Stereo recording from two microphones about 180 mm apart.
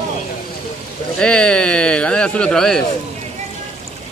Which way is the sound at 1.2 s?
5° left (ahead or behind).